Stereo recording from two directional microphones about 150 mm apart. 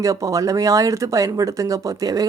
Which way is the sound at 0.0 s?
20° right (ahead or behind).